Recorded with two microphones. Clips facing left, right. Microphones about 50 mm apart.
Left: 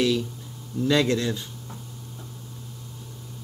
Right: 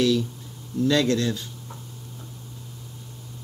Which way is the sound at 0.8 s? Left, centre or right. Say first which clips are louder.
Even; centre.